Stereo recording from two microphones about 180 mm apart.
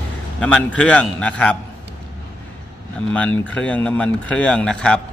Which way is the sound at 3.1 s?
5° left (ahead or behind).